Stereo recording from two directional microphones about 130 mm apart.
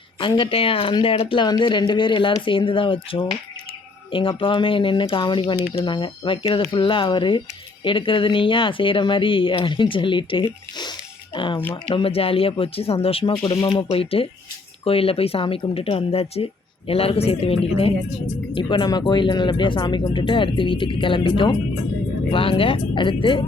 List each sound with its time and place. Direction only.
0.2 s speech: 40° left (ahead or behind)
13.3 s speech: 35° left (ahead or behind)
18.5 s speech: 35° left (ahead or behind)